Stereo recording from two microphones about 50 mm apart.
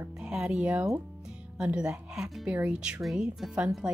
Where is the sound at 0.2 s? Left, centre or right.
Centre.